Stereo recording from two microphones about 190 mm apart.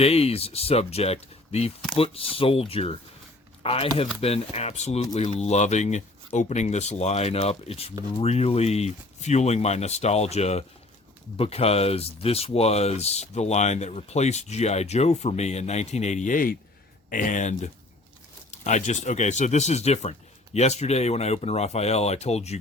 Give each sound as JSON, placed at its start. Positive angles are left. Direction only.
{"t": 0.0, "sound": "speech", "side_deg": 30}